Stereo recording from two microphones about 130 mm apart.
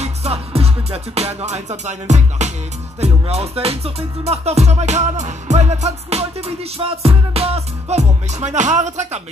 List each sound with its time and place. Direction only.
0.0 s music: 55° right (ahead or behind)